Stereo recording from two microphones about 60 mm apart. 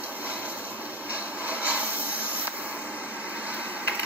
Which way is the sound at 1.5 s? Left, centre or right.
Right.